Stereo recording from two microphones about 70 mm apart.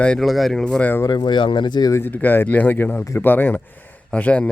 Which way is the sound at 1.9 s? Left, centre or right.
Left.